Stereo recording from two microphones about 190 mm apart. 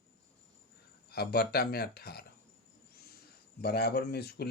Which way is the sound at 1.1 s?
55° left (ahead or behind).